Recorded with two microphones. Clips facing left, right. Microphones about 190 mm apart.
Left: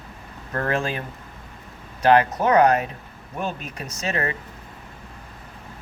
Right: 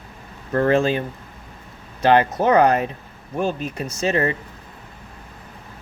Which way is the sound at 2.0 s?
30° right (ahead or behind).